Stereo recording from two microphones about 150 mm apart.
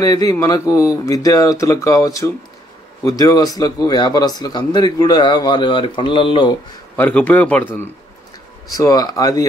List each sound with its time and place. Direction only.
0.0 s speech: 25° left (ahead or behind)
7.0 s speech: 10° left (ahead or behind)
8.7 s speech: 25° left (ahead or behind)